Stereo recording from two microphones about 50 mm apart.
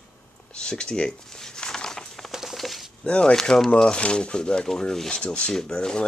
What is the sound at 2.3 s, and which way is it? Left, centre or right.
Patter, centre.